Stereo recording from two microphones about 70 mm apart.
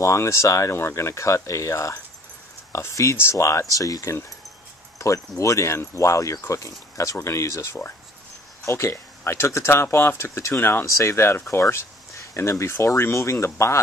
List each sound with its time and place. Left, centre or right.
0.0 s speech: left
4.9 s a sound: left
5.4 s speech: left